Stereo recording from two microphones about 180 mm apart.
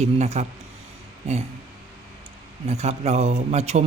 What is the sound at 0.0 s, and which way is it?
Speech, 35° right (ahead or behind).